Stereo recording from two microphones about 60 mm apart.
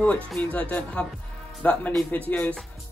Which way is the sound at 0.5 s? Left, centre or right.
Left.